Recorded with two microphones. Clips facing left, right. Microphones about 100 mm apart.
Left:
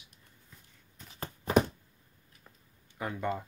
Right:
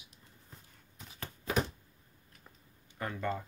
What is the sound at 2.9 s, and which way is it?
Speech, 15° left (ahead or behind).